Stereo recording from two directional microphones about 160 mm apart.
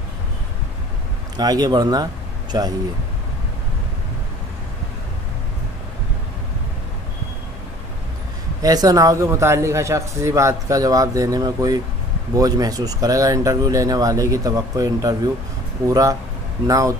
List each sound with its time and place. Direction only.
1.3 s a man's voice: 25° right (ahead or behind)
8.6 s a man's voice: 25° right (ahead or behind)